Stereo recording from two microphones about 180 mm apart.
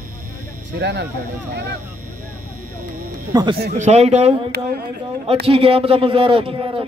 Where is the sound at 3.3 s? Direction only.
20° right (ahead or behind).